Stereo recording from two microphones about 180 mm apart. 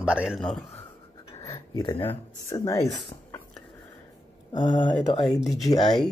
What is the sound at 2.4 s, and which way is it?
Speech, 15° left (ahead or behind).